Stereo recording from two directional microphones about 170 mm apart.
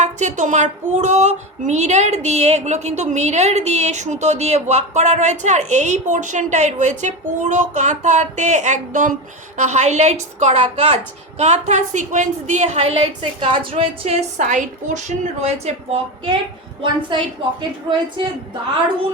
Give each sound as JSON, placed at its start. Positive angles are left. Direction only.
{"t": 0.0, "sound": "female singing", "side_deg": -45}
{"t": 13.4, "sound": "a woman's voice", "side_deg": -30}